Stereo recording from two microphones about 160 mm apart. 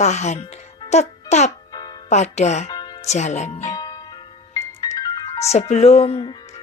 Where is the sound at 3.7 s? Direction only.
25° left (ahead or behind).